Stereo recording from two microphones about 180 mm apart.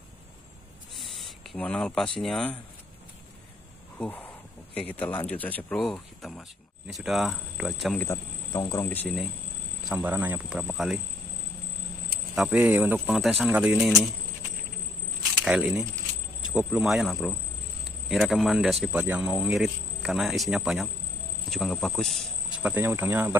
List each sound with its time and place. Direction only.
0.9 s a sound: centre (ahead or behind)
2.1 s speech: 5° left (ahead or behind)
4.0 s speech: 10° left (ahead or behind)
8.0 s speech: 15° left (ahead or behind)
9.0 s speech: centre (ahead or behind)
12.4 s speech: 5° right (ahead or behind)
15.2 s a sound: 5° right (ahead or behind)
16.5 s speech: 5° right (ahead or behind)
22.6 s speech: 10° right (ahead or behind)